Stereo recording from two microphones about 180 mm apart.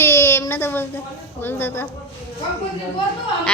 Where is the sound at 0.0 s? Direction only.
15° left (ahead or behind).